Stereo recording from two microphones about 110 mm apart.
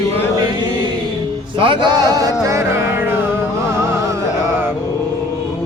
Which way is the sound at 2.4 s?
25° right (ahead or behind).